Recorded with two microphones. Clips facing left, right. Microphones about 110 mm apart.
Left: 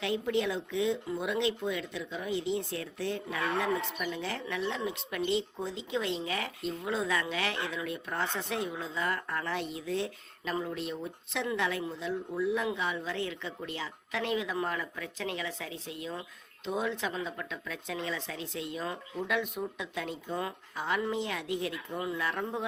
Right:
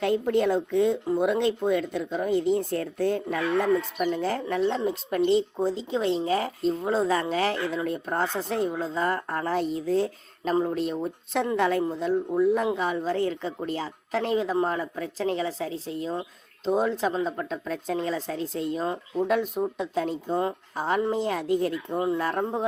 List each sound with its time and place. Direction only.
0.0 s speech: 45° right (ahead or behind)